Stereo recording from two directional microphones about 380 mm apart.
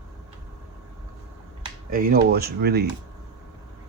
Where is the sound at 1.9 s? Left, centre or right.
Right.